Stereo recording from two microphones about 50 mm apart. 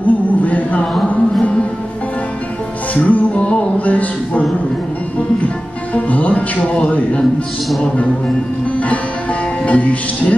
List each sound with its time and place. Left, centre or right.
0.0 s a sound: left
2.9 s music: left
5.9 s speech: left
8.7 s music: left
9.7 s speech: left